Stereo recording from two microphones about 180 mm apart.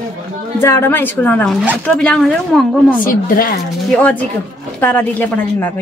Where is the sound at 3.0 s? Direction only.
50° left (ahead or behind).